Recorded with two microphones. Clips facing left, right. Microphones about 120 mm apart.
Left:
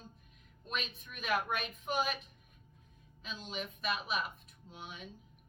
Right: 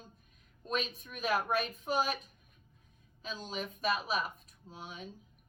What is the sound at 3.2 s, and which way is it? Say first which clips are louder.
A woman's voice: right 3 dB; 40° right (ahead or behind).